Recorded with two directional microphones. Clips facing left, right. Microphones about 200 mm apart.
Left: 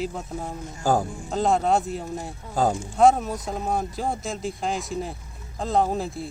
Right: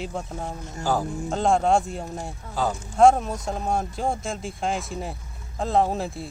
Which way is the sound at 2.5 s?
50° left (ahead or behind).